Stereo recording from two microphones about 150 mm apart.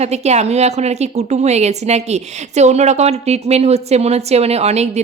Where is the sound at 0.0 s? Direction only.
45° right (ahead or behind).